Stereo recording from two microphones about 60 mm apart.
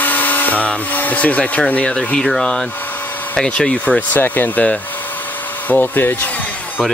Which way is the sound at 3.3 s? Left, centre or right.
Centre.